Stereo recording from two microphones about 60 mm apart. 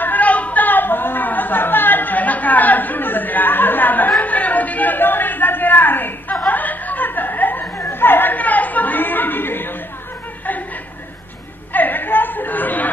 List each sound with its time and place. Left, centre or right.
0.0 s a sound: left
6.4 s chuckle: left
7.7 s chatter: left
11.7 s chatter: left